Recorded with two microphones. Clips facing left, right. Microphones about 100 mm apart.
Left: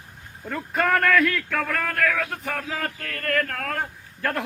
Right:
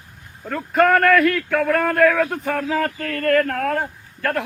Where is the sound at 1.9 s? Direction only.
30° right (ahead or behind).